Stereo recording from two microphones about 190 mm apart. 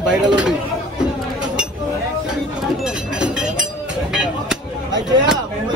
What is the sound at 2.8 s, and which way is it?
Music, 5° right (ahead or behind).